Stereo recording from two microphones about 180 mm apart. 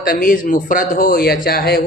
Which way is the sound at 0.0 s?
50° left (ahead or behind).